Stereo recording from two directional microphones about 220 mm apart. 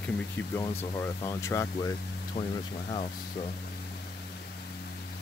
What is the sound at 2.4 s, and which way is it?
Speech, 25° left (ahead or behind).